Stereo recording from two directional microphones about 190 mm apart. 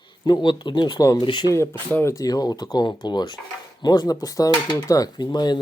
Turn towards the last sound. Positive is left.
turn(degrees=20)  # may be behind; listen again after turning